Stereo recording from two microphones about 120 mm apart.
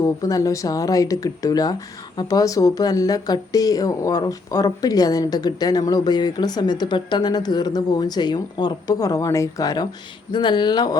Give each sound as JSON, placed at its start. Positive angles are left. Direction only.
{"t": 0.0, "sound": "a woman's voice", "side_deg": 30}